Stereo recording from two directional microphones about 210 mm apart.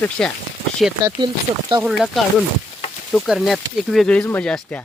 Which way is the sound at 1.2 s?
25° right (ahead or behind).